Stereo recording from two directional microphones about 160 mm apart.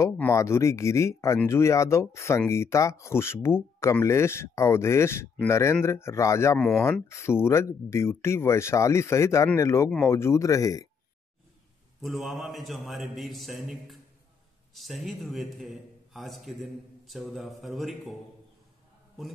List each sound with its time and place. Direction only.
0.0 s speech: 15° left (ahead or behind)
12.0 s a man's voice: centre (ahead or behind)